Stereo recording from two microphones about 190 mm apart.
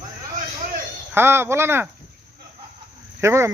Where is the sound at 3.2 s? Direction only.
15° right (ahead or behind).